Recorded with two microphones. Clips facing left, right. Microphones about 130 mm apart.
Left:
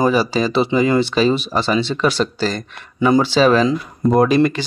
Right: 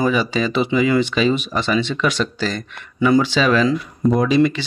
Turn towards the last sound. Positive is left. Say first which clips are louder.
# left 2 dB
turn(degrees=50)  # may be behind; listen again after turning